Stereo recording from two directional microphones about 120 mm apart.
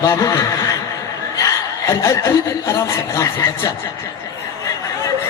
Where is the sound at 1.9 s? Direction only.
25° left (ahead or behind).